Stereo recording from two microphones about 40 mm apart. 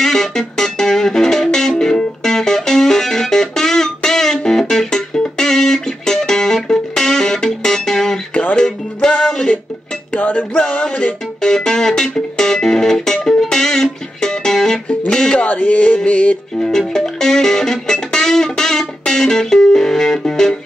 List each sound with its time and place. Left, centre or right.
0.0 s music: centre
8.3 s music: left
8.5 s music: centre
10.1 s music: left
11.4 s music: centre
15.4 s music: left
16.5 s music: centre